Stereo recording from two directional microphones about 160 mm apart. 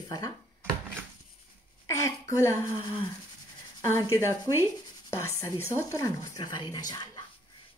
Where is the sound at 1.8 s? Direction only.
20° left (ahead or behind).